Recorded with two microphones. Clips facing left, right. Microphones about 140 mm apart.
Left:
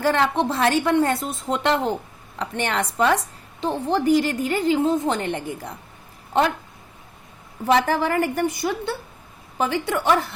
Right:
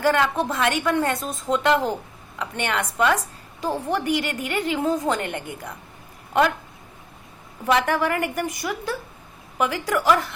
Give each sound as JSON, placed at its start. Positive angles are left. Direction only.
{"t": 0.0, "sound": "a woman's voice", "side_deg": 30}
{"t": 7.7, "sound": "a woman's voice", "side_deg": 30}